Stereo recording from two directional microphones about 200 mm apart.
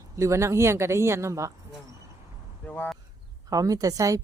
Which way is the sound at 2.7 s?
5° left (ahead or behind).